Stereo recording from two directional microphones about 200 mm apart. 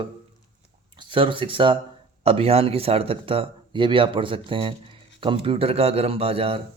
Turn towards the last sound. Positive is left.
turn(degrees=-30)  # may be behind; listen again after turning